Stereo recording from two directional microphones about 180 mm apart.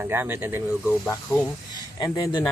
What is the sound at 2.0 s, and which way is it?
Speech, 20° left (ahead or behind).